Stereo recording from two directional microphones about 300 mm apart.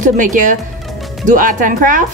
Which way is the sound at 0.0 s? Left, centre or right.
Right.